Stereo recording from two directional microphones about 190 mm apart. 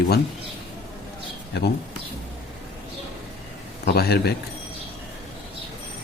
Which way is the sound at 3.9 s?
55° left (ahead or behind).